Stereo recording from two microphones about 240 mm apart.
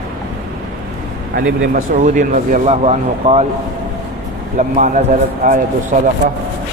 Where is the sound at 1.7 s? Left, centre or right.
Right.